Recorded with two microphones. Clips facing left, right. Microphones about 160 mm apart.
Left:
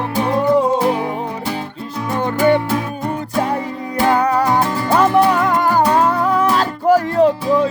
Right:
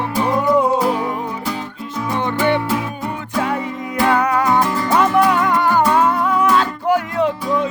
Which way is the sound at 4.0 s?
30° left (ahead or behind).